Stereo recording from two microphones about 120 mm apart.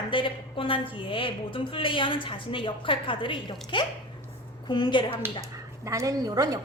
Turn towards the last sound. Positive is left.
turn(degrees=-30)  # may be behind; listen again after turning